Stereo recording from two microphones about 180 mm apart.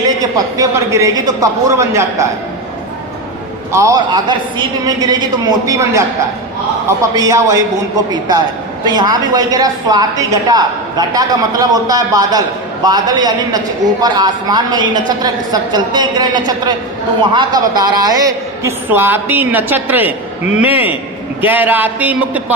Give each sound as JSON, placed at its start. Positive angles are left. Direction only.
{"t": 0.2, "sound": "a woman's voice", "side_deg": -20}
{"t": 3.7, "sound": "a woman's voice", "side_deg": -15}
{"t": 7.2, "sound": "a woman's voice", "side_deg": -20}
{"t": 8.9, "sound": "a woman's voice", "side_deg": -25}